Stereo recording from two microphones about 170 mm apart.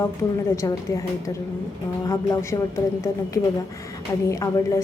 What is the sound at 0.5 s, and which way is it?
A woman's voice, 20° left (ahead or behind).